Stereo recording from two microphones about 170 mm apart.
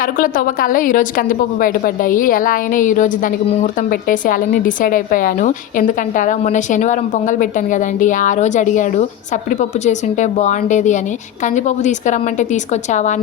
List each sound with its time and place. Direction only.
0.0 s a woman's voice: 55° left (ahead or behind)